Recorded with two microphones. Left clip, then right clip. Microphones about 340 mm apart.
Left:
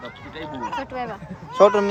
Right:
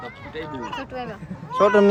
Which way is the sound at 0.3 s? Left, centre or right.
Centre.